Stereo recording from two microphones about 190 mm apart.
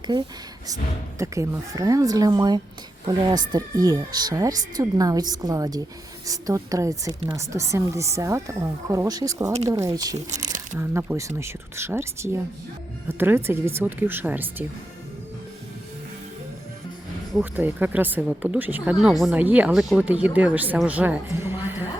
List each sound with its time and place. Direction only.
1.2 s speech: 15° right (ahead or behind)
10.2 s speech: 40° right (ahead or behind)
10.8 s speech: 15° right (ahead or behind)
17.3 s speech: 10° right (ahead or behind)